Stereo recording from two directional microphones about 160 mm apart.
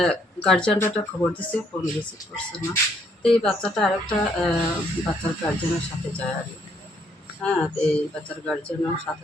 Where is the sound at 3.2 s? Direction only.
5° left (ahead or behind).